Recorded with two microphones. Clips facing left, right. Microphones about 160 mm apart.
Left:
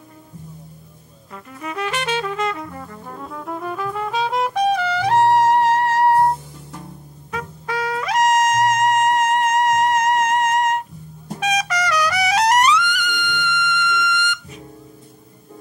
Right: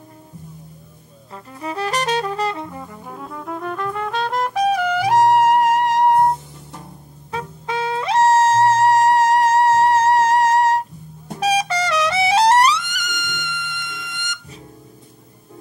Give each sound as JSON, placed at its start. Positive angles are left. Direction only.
{"t": 1.3, "sound": "music", "side_deg": -30}
{"t": 2.7, "sound": "music", "side_deg": -10}
{"t": 11.3, "sound": "trumpet", "side_deg": -30}